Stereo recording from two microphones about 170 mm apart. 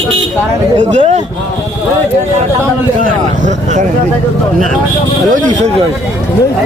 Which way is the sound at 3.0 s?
45° right (ahead or behind).